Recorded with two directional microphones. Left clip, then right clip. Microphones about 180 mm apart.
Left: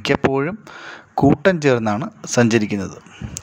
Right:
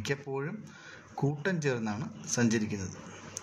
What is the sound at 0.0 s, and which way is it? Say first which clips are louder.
A man's voice: left 17 dB; 55° left (ahead or behind).